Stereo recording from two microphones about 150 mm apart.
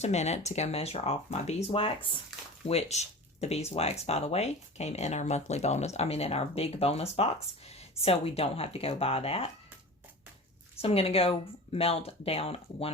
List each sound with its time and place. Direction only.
0.0 s speech: 50° left (ahead or behind)
2.6 s speech: 50° left (ahead or behind)
10.8 s speech: 40° left (ahead or behind)